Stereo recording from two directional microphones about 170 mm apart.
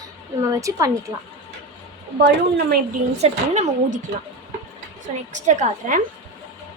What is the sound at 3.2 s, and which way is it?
Speech, 40° right (ahead or behind).